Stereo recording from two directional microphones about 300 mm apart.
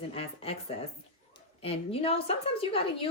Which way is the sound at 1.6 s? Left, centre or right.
Centre.